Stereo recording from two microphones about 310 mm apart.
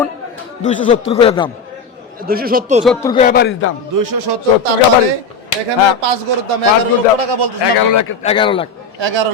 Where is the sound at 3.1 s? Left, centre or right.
Left.